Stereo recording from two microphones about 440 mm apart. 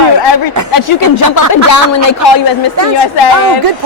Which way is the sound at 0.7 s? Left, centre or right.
Left.